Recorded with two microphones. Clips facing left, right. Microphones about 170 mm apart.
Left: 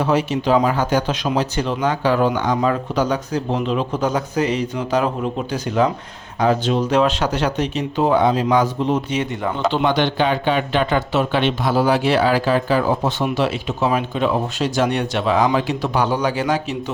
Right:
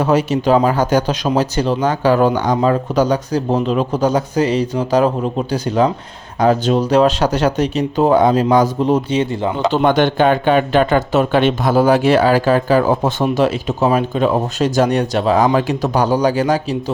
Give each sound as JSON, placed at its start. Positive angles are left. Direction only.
{"t": 0.0, "sound": "speech", "side_deg": -45}
{"t": 9.7, "sound": "speech", "side_deg": -50}